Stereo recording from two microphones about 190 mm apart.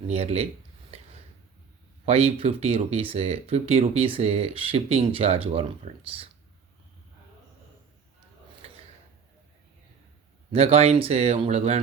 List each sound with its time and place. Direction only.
0.1 s speech: 35° right (ahead or behind)
0.9 s a sound: 35° right (ahead or behind)
2.0 s speech: 30° right (ahead or behind)
10.5 s speech: 30° right (ahead or behind)